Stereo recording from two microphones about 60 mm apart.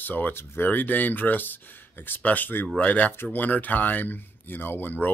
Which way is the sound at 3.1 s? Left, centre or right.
Left.